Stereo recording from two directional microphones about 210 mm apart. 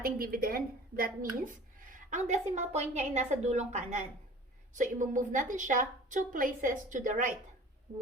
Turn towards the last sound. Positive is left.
turn(degrees=-40)  # may be behind; listen again after turning